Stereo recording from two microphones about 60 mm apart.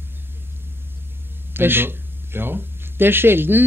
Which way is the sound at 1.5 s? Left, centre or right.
Right.